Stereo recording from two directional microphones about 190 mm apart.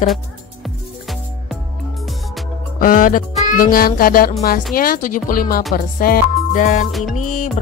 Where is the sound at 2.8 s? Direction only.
45° left (ahead or behind).